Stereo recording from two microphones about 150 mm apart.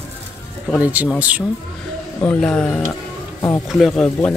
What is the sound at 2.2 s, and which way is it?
Speech, 10° left (ahead or behind).